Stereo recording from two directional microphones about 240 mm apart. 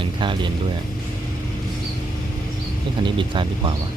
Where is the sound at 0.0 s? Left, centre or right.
Centre.